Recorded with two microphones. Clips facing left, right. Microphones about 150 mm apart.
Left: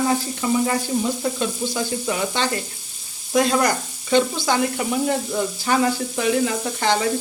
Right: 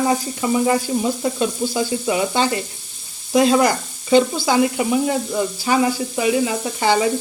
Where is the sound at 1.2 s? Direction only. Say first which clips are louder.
Right 3 dB; 10° right (ahead or behind).